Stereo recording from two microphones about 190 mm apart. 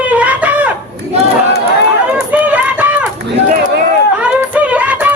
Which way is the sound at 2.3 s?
10° right (ahead or behind).